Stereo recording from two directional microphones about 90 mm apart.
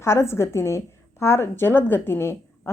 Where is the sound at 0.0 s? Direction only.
30° left (ahead or behind).